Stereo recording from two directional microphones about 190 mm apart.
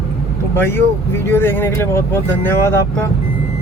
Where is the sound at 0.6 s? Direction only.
10° left (ahead or behind).